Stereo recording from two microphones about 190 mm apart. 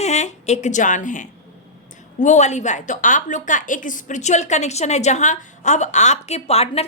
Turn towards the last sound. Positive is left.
turn(degrees=35)  # may be behind; listen again after turning